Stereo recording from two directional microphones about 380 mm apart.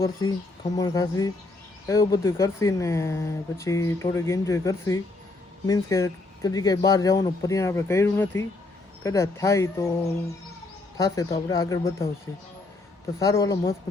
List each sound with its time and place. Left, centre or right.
0.0 s speech: centre
10.9 s speech: centre
13.1 s speech: centre